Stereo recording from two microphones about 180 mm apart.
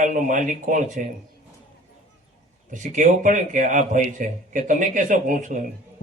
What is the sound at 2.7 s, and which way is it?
A man's voice, 45° right (ahead or behind).